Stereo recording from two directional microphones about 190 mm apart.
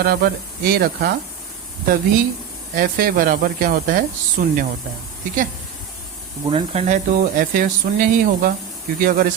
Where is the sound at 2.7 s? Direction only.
50° right (ahead or behind).